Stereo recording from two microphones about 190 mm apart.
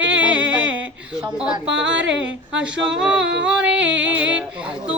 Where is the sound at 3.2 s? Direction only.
70° right (ahead or behind).